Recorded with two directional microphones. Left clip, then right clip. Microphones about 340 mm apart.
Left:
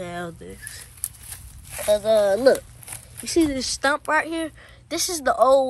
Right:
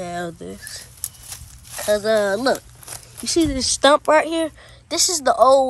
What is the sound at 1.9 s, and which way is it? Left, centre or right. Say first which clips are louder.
Speech: even; centre.